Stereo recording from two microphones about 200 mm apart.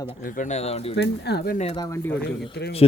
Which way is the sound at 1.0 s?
55° left (ahead or behind).